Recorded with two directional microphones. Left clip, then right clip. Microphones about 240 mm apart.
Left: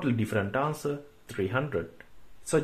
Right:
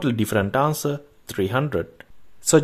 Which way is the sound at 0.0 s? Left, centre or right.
Right.